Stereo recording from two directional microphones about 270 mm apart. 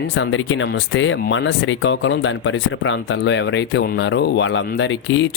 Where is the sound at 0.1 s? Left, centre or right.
Left.